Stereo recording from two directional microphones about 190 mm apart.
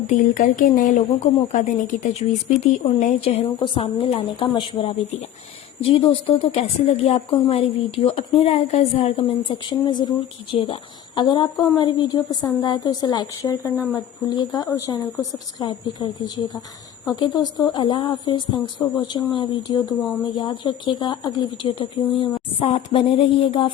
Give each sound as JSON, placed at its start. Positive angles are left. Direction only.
{"t": 0.1, "sound": "a woman's voice", "side_deg": 40}